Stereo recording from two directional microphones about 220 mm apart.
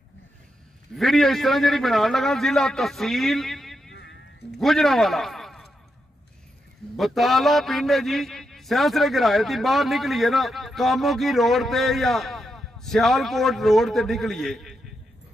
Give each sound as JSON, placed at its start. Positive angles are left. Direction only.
{"t": 0.9, "sound": "a man's voice", "side_deg": 0}
{"t": 3.9, "sound": "music", "side_deg": 55}
{"t": 4.5, "sound": "a man's voice", "side_deg": 0}
{"t": 7.0, "sound": "a man's voice", "side_deg": 0}